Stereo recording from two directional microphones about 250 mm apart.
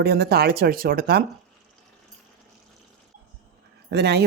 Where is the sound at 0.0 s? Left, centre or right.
Right.